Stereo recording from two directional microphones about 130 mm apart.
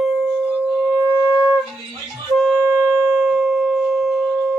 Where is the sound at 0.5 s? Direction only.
15° right (ahead or behind).